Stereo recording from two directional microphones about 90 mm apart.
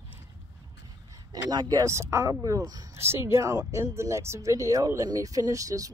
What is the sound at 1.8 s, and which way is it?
Speech, 30° right (ahead or behind).